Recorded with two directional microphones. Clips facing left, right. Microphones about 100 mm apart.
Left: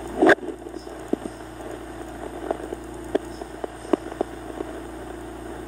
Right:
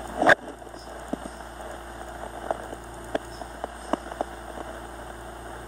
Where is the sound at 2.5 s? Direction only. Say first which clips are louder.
Left 2 dB; 25° right (ahead or behind).